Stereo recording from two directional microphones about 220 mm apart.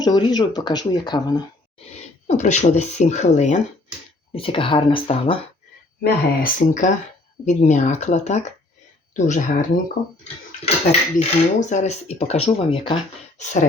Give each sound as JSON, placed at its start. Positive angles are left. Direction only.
{"t": 0.0, "sound": "speech", "side_deg": 20}
{"t": 2.2, "sound": "speech", "side_deg": 30}
{"t": 6.0, "sound": "speech", "side_deg": 40}
{"t": 11.2, "sound": "speech", "side_deg": 30}
{"t": 13.4, "sound": "speech", "side_deg": 35}